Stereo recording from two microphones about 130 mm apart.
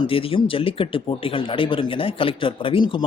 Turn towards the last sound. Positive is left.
turn(degrees=40)  # may be behind; listen again after turning